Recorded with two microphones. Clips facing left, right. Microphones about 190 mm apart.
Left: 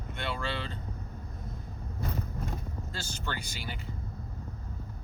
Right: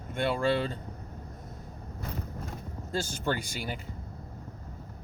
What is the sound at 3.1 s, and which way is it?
Speech, 50° right (ahead or behind).